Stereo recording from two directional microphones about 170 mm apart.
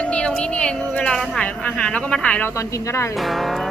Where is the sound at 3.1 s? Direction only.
Centre (ahead or behind).